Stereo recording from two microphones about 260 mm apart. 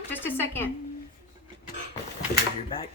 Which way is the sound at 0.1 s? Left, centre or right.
Centre.